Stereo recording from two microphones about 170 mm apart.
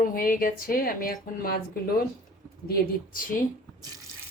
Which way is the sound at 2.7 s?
55° left (ahead or behind).